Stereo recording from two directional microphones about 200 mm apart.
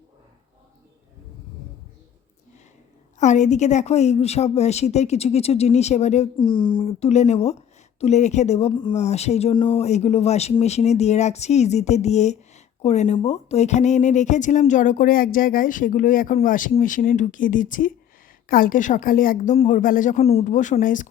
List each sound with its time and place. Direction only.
3.2 s a woman's voice: 35° left (ahead or behind)